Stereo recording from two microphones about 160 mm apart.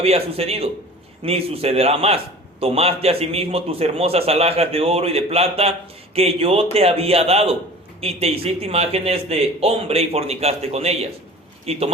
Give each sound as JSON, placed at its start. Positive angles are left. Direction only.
{"t": 0.0, "sound": "a man's voice", "side_deg": -40}